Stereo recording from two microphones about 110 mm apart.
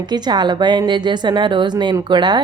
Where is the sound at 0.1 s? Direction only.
40° right (ahead or behind).